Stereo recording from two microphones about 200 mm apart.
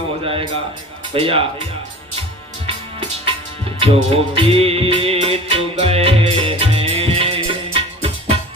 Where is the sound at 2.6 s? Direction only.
25° right (ahead or behind).